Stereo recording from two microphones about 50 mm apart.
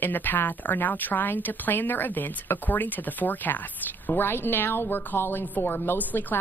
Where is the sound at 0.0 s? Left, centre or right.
Left.